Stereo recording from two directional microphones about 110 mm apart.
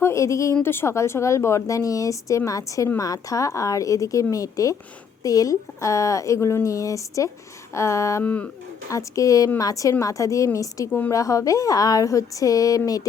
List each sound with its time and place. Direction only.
0.0 s a woman's voice: 25° left (ahead or behind)
8.2 s speech: 15° left (ahead or behind)
8.9 s a woman's voice: 30° left (ahead or behind)